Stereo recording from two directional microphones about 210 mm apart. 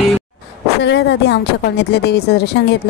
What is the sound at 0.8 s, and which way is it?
A woman's voice, 55° left (ahead or behind).